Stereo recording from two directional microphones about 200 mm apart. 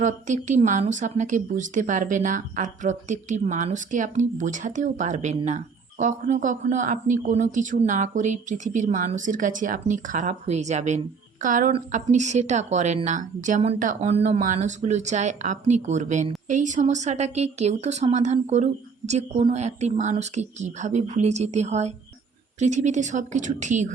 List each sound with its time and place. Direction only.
0.0 s speech: 40° right (ahead or behind)